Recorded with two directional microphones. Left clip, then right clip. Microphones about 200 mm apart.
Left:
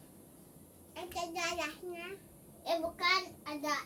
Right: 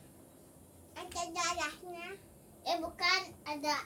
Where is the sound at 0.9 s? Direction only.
10° left (ahead or behind).